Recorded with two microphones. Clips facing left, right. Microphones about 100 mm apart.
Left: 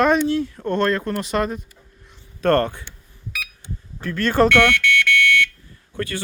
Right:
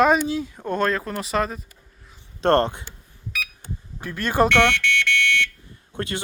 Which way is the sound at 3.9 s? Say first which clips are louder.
Left 3 dB; 10° right (ahead or behind).